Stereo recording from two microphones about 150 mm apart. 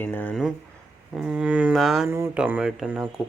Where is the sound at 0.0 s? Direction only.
10° left (ahead or behind).